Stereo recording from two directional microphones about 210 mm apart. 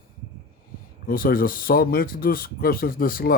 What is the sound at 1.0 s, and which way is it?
Speech, 45° left (ahead or behind).